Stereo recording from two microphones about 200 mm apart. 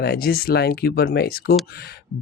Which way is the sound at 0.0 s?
50° left (ahead or behind).